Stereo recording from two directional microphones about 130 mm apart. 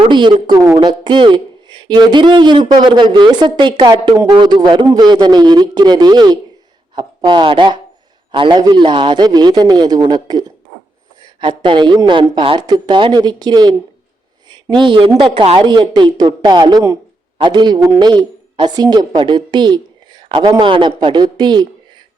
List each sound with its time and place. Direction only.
0.1 s speech: 35° right (ahead or behind)
0.6 s speech: 20° right (ahead or behind)
0.9 s speech: 35° right (ahead or behind)
17.7 s speech: 25° right (ahead or behind)
18.1 s speech: 35° right (ahead or behind)
19.5 s a sound: 35° right (ahead or behind)
20.6 s speech: 40° right (ahead or behind)